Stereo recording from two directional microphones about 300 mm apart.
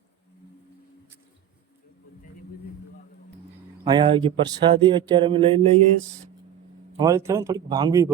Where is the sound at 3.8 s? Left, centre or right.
Centre.